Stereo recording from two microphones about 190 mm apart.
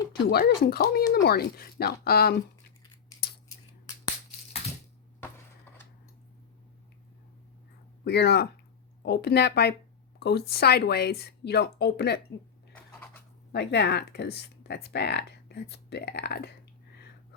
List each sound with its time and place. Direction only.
0.1 s speech: 55° left (ahead or behind)
8.0 s speech: 60° left (ahead or behind)
12.7 s a sound: 10° left (ahead or behind)
13.5 s speech: 65° left (ahead or behind)